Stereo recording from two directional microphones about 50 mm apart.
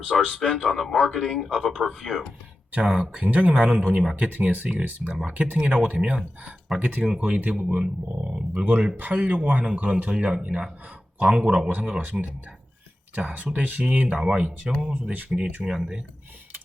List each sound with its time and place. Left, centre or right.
0.2 s speech: centre
2.7 s speech: right
4.1 s speech: right; by 6.5 s centre
6.7 s speech: right
7.0 s speech: centre
7.3 s speech: right
11.7 s speech: right
13.3 s speech: right
14.2 s speech: centre